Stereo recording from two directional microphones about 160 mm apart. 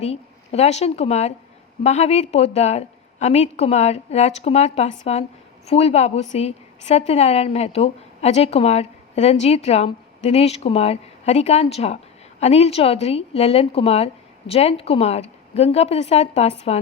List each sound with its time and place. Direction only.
0.0 s a woman's voice: 40° left (ahead or behind)